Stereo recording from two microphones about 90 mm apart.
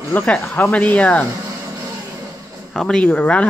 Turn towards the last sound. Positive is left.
turn(degrees=15)  # may be behind; listen again after turning